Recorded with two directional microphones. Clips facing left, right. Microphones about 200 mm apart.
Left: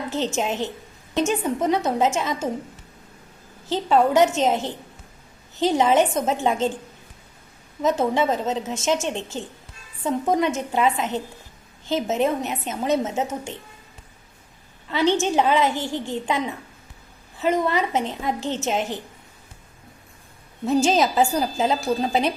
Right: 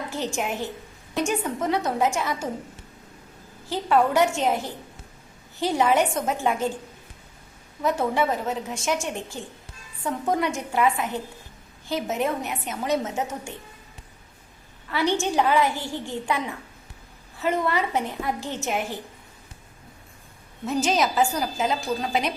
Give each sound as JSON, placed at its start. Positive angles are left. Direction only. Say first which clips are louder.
{"t": 0.3, "sound": "a woman's voice", "louder": "left 3 dB", "side_deg": 25}
{"t": 3.7, "sound": "a woman's voice", "louder": "left 2 dB", "side_deg": 20}
{"t": 7.8, "sound": "a woman's voice", "louder": "left 3 dB", "side_deg": 20}
{"t": 14.8, "sound": "a woman's voice", "louder": "left 4 dB", "side_deg": 20}
{"t": 17.4, "sound": "a woman's voice", "louder": "left 3 dB", "side_deg": 20}
{"t": 20.7, "sound": "a woman's voice", "louder": "left 4 dB", "side_deg": 30}